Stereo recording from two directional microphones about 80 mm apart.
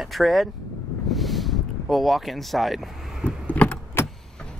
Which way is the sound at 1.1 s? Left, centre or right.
Centre.